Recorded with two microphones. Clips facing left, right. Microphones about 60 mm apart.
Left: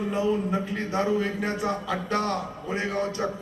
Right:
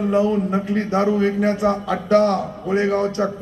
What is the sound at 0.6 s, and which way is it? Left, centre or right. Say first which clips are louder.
A man's voice: right 7 dB; centre.